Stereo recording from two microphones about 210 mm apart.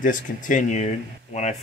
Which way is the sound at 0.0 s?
40° left (ahead or behind).